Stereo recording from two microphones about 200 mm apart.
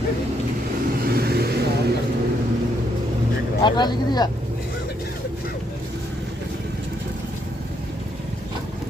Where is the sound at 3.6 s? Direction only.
20° left (ahead or behind).